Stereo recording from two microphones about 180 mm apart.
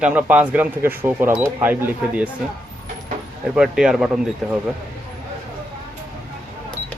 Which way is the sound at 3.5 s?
5° right (ahead or behind).